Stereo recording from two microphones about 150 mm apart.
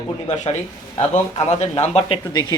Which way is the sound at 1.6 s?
45° left (ahead or behind).